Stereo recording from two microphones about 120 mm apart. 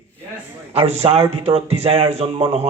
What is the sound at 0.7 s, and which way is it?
A man's voice, 60° right (ahead or behind).